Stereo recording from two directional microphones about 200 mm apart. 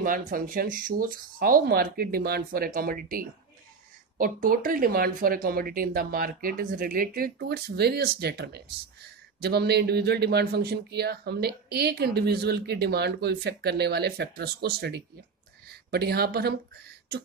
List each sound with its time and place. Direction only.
0.0 s speech: 45° right (ahead or behind)